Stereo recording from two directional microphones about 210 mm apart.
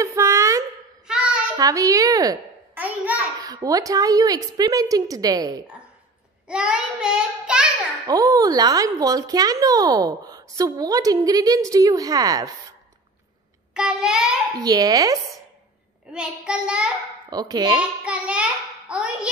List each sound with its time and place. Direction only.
0.0 s a sound: 15° right (ahead or behind)
1.0 s child singing: 5° right (ahead or behind)
1.6 s a child's voice: 15° right (ahead or behind)
6.4 s child singing: 5° right (ahead or behind)
8.1 s speech: 15° right (ahead or behind)
13.7 s child singing: 5° right (ahead or behind)
14.6 s speech: 20° right (ahead or behind)
16.1 s child singing: 5° right (ahead or behind)
17.3 s a child's voice: 20° right (ahead or behind)
18.0 s a child's voice: 5° right (ahead or behind)